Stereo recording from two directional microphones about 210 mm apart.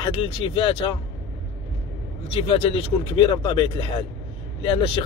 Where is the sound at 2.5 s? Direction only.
25° left (ahead or behind).